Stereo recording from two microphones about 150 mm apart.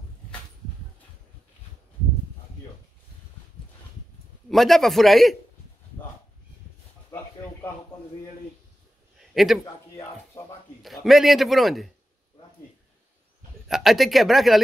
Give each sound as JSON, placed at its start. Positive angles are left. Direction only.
{"t": 4.5, "sound": "a man's voice", "side_deg": 0}
{"t": 7.1, "sound": "a sound", "side_deg": 20}
{"t": 9.3, "sound": "a man's voice", "side_deg": 0}
{"t": 10.4, "sound": "a sound", "side_deg": 15}
{"t": 10.8, "sound": "a man's voice", "side_deg": 0}
{"t": 13.7, "sound": "a man's voice", "side_deg": 0}